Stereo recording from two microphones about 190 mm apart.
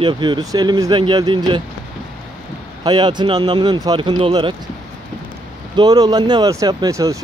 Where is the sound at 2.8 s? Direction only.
25° right (ahead or behind).